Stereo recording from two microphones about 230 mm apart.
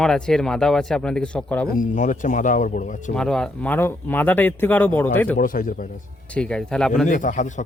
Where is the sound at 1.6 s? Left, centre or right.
Left.